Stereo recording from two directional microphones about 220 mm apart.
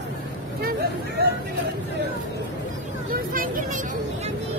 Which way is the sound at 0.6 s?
45° right (ahead or behind).